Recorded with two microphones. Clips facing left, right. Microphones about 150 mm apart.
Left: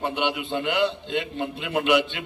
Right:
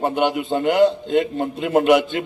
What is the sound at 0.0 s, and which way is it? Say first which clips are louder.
A man's voice: right 6 dB; 45° right (ahead or behind).